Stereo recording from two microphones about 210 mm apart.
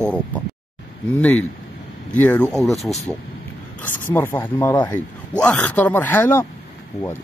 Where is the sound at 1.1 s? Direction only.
10° left (ahead or behind).